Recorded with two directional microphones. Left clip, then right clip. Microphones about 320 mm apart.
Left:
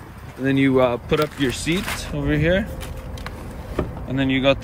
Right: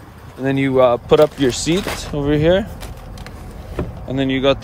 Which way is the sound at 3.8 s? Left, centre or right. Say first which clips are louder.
Right 2 dB; centre.